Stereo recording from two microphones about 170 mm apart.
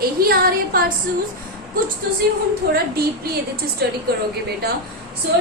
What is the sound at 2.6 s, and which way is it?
Speech, 70° right (ahead or behind).